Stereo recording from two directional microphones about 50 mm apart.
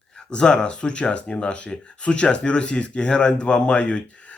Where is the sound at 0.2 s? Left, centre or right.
Centre.